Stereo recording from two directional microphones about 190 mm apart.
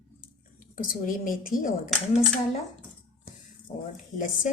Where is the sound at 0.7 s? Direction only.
45° left (ahead or behind).